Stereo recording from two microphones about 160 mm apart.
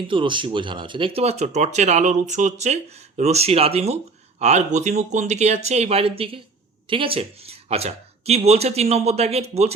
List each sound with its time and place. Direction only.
0.1 s speech: 30° right (ahead or behind)